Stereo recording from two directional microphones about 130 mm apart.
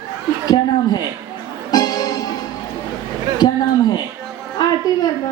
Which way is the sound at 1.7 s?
30° left (ahead or behind).